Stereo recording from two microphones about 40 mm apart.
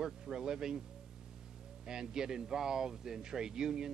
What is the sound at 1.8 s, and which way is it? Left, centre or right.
Speech, centre.